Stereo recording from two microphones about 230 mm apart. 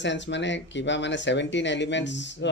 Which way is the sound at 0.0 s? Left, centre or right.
Left.